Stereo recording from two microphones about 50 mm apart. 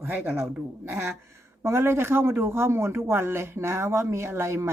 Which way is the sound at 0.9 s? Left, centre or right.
Right.